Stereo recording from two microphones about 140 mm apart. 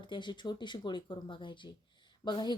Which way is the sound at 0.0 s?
35° left (ahead or behind).